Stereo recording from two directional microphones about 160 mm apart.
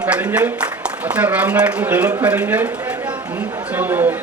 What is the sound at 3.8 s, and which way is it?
Speech, 10° right (ahead or behind).